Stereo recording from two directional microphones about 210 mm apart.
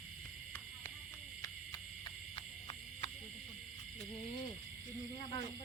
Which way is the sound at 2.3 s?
30° left (ahead or behind).